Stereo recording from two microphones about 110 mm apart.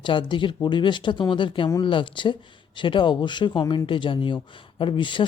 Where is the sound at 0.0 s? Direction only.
50° left (ahead or behind).